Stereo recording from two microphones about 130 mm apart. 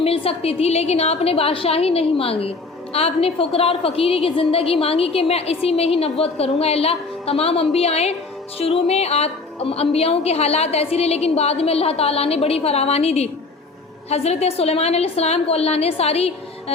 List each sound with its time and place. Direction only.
0.0 s a woman's voice: 50° left (ahead or behind)